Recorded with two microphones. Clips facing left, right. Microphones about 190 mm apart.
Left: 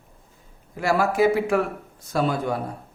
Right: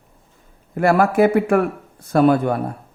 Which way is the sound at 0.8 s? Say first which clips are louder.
Right 5 dB; 55° right (ahead or behind).